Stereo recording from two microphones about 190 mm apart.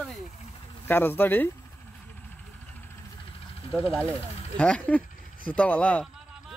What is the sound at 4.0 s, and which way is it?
Speech, 5° left (ahead or behind).